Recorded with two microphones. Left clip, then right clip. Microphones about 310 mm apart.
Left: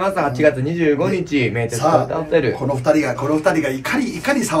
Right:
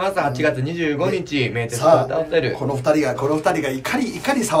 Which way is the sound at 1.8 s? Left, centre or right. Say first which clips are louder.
Right 2 dB; centre.